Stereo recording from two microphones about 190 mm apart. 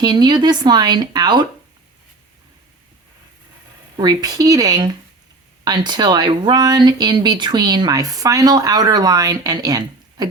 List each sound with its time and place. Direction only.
0.0 s speech: 20° right (ahead or behind)
3.9 s speech: 20° right (ahead or behind)